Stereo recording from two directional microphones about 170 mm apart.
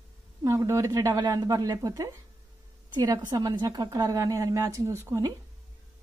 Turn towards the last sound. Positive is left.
turn(degrees=-15)  # may be behind; listen again after turning